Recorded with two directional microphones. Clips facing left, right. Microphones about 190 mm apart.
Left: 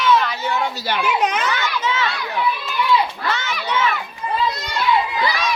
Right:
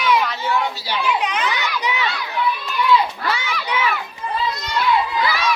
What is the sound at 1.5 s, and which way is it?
Children playing, 15° right (ahead or behind).